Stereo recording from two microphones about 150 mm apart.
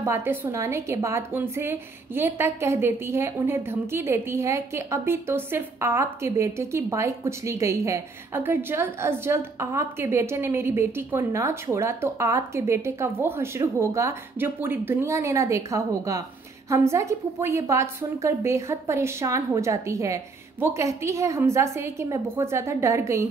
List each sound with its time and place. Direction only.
0.0 s a woman's voice: 15° right (ahead or behind)